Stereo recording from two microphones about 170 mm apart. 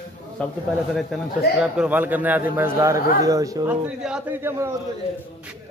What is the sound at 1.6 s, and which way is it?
A man's voice, 5° right (ahead or behind).